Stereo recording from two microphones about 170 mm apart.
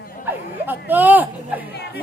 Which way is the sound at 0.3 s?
10° right (ahead or behind).